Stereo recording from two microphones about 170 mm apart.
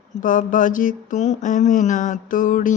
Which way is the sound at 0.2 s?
50° left (ahead or behind).